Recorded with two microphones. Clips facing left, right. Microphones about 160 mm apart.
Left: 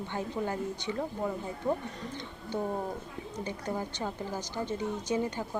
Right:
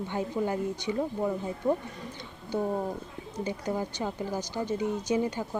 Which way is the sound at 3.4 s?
15° right (ahead or behind).